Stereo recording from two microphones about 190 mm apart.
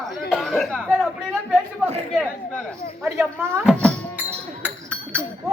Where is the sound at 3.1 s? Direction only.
15° right (ahead or behind).